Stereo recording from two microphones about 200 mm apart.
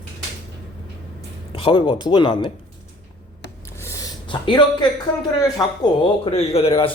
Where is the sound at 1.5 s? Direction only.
25° left (ahead or behind).